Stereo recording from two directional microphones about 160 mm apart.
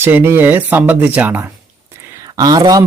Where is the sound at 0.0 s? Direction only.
15° right (ahead or behind).